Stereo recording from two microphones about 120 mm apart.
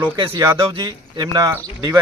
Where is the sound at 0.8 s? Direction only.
35° right (ahead or behind).